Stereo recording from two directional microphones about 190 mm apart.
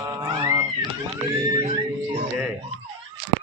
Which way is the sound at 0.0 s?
20° right (ahead or behind).